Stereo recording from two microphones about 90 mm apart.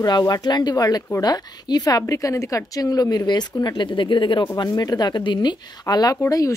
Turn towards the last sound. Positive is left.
turn(degrees=45)  # may be behind; listen again after turning